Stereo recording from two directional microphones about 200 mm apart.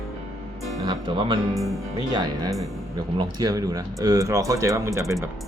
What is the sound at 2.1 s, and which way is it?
Speech, 20° right (ahead or behind).